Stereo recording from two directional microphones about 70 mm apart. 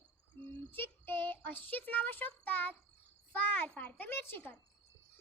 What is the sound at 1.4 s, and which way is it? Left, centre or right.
A child's voice, left.